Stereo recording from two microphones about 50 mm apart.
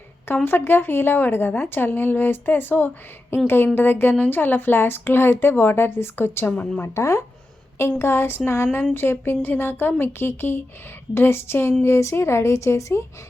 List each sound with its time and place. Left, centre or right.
0.4 s a woman's voice: left
6.8 s speech: left
7.8 s a woman's voice: left
11.9 s speech: left